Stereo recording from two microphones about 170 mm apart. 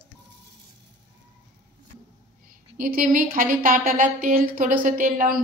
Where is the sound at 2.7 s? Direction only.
55° right (ahead or behind).